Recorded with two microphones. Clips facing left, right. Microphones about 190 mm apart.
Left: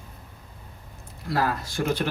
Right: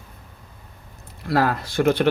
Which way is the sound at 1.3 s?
65° right (ahead or behind).